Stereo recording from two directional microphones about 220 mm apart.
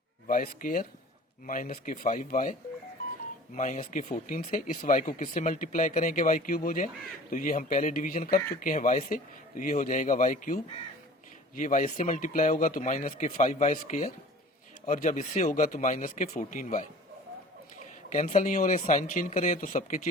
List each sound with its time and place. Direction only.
0.3 s speech: 40° left (ahead or behind)